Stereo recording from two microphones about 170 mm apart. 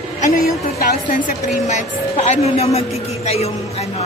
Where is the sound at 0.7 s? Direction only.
50° left (ahead or behind).